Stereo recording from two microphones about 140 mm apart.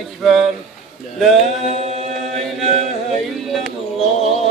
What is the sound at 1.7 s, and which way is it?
Chant, 55° right (ahead or behind).